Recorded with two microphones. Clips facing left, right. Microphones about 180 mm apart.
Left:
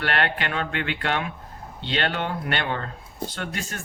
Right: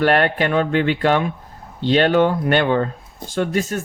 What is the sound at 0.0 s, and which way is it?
Speech, 45° right (ahead or behind).